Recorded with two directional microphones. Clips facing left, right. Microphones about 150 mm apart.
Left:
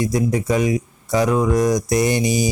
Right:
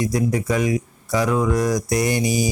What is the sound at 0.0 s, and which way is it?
A man's voice, 20° left (ahead or behind).